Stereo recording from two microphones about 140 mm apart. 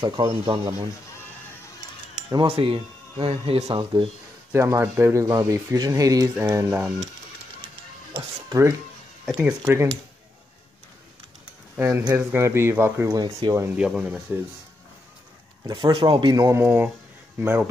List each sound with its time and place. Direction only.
0.0 s speech: 30° right (ahead or behind)
2.3 s speech: 40° right (ahead or behind)
3.6 s speech: 35° right (ahead or behind)
4.5 s speech: 20° right (ahead or behind)
8.5 s speech: 20° right (ahead or behind)
12.1 s speech: 10° right (ahead or behind)
13.2 s speech: 30° right (ahead or behind)
13.7 s speech: 5° right (ahead or behind)
15.6 s speech: 35° right (ahead or behind); by 17.6 s 15° right (ahead or behind)